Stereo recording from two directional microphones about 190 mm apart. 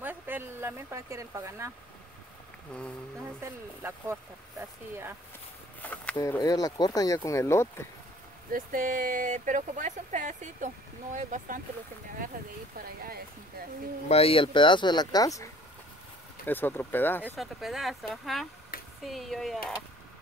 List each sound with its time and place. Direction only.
0.0 s speech: 10° right (ahead or behind)
2.7 s speech: 5° left (ahead or behind)
3.3 s speech: 15° right (ahead or behind)
5.8 s speech: 10° left (ahead or behind)
8.5 s speech: 45° right (ahead or behind)
14.0 s speech: 30° left (ahead or behind); by 17.4 s 10° left (ahead or behind)
17.4 s speech: centre (ahead or behind)
18.7 s a sound: 50° left (ahead or behind)
19.0 s speech: centre (ahead or behind)